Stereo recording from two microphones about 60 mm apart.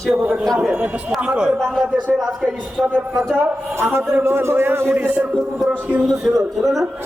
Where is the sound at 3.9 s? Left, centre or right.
Right.